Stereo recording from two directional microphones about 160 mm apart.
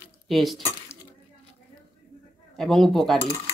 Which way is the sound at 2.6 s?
5° left (ahead or behind).